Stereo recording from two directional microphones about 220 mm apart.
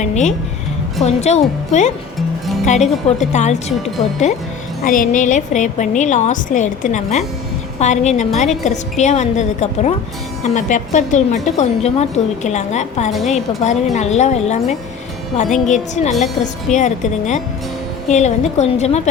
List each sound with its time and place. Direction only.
0.0 s a woman's voice: 35° left (ahead or behind)
4.9 s a woman's voice: 35° left (ahead or behind)